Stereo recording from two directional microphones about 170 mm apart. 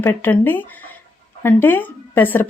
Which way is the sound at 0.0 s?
10° left (ahead or behind).